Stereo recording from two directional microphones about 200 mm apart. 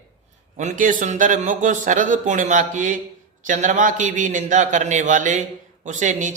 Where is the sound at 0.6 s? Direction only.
40° right (ahead or behind).